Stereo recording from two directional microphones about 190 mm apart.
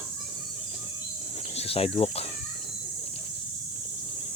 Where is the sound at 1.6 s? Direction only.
30° left (ahead or behind).